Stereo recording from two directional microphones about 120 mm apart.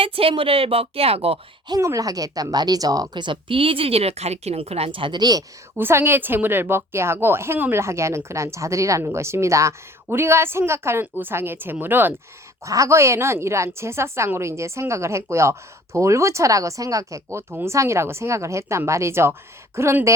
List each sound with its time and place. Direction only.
0.0 s speech: 50° right (ahead or behind)
1.6 s speech: 30° right (ahead or behind)
5.7 s a woman's voice: 20° right (ahead or behind)
12.6 s a woman's voice: 25° right (ahead or behind)